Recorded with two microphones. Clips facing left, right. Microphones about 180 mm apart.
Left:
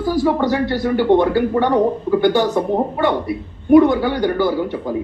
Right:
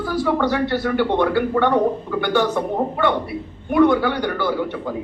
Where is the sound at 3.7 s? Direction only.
40° left (ahead or behind).